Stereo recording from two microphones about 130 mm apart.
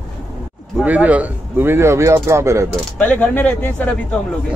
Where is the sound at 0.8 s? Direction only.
10° right (ahead or behind).